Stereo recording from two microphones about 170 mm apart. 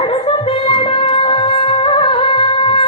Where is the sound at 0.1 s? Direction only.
30° left (ahead or behind).